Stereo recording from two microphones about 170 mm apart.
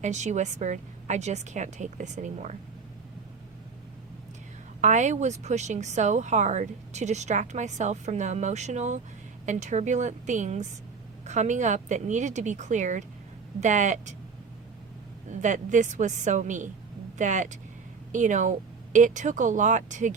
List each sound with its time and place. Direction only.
0.0 s speech: 45° right (ahead or behind)
4.8 s speech: 45° right (ahead or behind)
15.3 s speech: 45° right (ahead or behind)